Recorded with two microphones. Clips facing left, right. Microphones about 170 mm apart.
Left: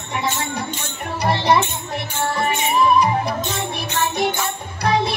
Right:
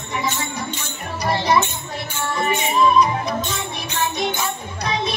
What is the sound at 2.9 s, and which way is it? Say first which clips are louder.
Music: even; 60° left (ahead or behind).